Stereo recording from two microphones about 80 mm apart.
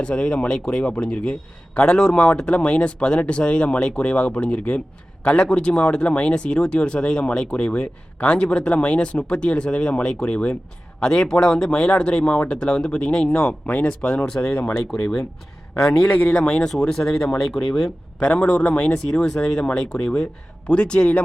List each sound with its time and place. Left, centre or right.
0.0 s speech: centre
16.0 s speech: centre
18.2 s speech: centre